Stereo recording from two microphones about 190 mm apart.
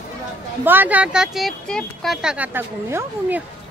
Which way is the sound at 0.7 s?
10° right (ahead or behind).